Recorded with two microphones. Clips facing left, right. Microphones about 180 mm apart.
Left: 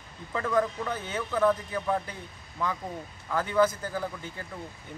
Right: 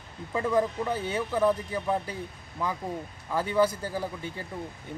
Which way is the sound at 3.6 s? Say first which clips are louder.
Left 1 dB; 10° right (ahead or behind).